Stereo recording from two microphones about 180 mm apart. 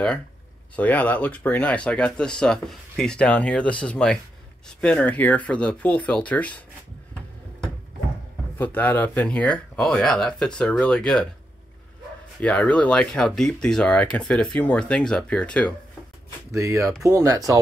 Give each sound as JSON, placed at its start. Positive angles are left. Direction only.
{"t": 0.7, "sound": "speech", "side_deg": 10}
{"t": 8.5, "sound": "speech", "side_deg": 10}
{"t": 12.4, "sound": "speech", "side_deg": 5}
{"t": 16.5, "sound": "speech", "side_deg": -15}